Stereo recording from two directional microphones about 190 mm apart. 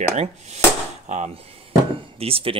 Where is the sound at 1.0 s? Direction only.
35° right (ahead or behind).